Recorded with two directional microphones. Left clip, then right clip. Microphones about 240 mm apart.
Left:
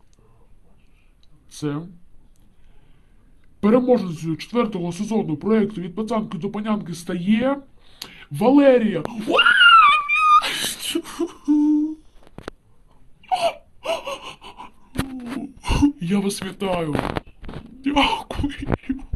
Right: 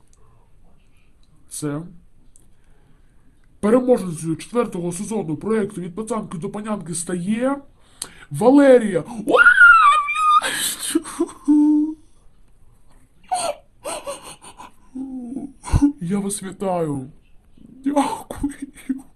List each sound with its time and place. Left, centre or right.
1.5 s speech: centre
3.6 s speech: centre
11.0 s humming: centre
13.2 s wheeze: centre
14.3 s gasp: centre
15.4 s throat clearing: centre
17.8 s a sound: centre
18.9 s a sound: centre